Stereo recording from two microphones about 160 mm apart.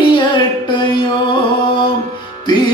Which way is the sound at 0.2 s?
30° left (ahead or behind).